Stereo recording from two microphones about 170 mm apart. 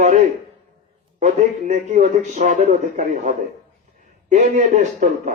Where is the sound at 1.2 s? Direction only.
45° right (ahead or behind).